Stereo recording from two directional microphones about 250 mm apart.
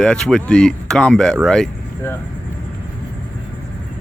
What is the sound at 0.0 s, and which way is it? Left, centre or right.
Speech, centre.